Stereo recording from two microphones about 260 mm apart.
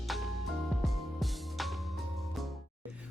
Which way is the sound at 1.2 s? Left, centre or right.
Centre.